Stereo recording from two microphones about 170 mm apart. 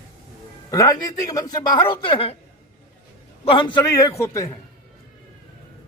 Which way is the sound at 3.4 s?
30° left (ahead or behind).